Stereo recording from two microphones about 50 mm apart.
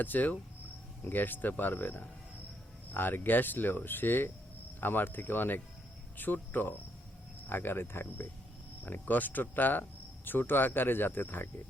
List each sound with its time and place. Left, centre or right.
0.0 s speech: left
8.8 s speech: left